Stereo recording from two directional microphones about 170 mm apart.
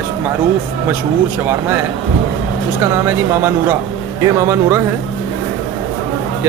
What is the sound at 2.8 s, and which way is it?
Speech, 15° right (ahead or behind).